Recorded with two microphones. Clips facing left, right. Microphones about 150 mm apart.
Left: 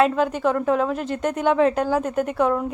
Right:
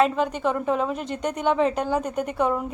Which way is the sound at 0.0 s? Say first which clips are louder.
Left 2 dB; 5° left (ahead or behind).